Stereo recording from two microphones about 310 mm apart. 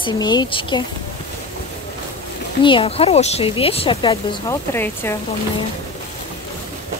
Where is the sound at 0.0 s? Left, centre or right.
Centre.